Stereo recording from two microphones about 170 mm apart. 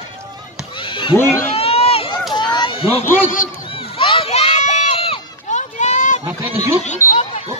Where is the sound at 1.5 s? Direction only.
35° left (ahead or behind).